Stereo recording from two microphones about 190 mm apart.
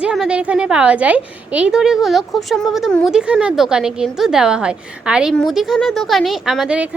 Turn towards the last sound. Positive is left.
turn(degrees=-5)  # may be behind; listen again after turning